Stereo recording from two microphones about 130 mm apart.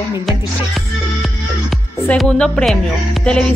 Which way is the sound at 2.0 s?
5° left (ahead or behind).